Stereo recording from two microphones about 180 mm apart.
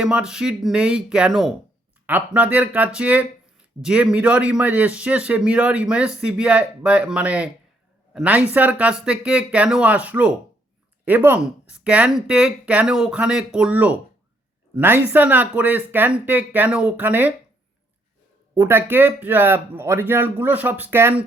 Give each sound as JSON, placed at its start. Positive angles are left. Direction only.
{"t": 0.0, "sound": "speech", "side_deg": -5}
{"t": 18.5, "sound": "speech", "side_deg": -10}